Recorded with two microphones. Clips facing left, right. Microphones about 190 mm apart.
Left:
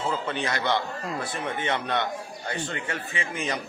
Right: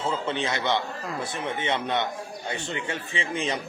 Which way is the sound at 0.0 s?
25° right (ahead or behind).